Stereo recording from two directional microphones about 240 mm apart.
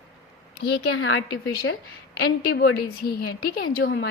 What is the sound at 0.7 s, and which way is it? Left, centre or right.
Speech, left.